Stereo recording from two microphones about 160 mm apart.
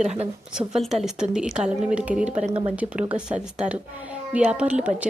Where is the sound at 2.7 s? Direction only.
5° right (ahead or behind).